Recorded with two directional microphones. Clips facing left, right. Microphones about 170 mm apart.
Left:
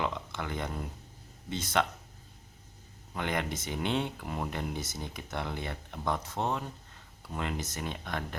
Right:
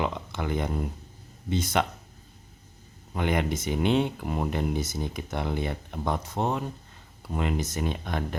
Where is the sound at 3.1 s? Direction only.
15° right (ahead or behind).